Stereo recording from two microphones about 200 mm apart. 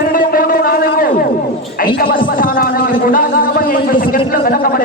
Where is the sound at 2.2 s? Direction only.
45° left (ahead or behind).